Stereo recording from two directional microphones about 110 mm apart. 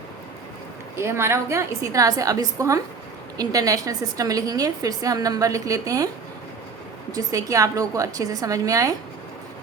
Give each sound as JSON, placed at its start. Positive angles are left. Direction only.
{"t": 0.9, "sound": "a woman's voice", "side_deg": -25}
{"t": 7.1, "sound": "a woman's voice", "side_deg": -30}